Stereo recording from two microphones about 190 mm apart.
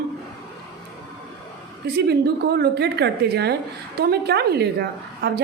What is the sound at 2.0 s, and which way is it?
A woman's voice, 60° right (ahead or behind).